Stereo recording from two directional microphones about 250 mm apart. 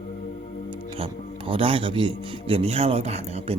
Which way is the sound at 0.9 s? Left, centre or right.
Right.